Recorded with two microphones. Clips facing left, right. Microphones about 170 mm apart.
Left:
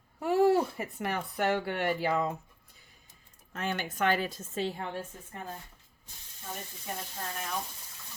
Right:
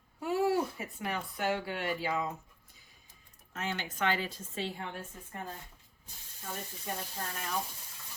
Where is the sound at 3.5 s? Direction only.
55° left (ahead or behind).